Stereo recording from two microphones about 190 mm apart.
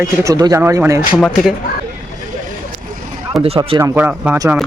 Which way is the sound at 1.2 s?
Centre (ahead or behind).